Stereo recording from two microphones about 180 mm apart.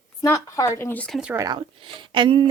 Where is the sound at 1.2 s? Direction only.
5° right (ahead or behind).